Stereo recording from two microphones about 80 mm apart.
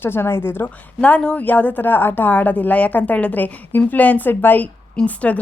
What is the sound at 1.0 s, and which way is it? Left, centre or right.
Speech, centre.